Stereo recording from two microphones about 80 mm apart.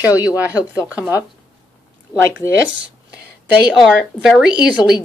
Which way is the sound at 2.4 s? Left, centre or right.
Left.